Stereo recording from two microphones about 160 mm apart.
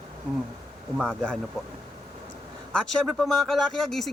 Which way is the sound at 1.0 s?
5° left (ahead or behind).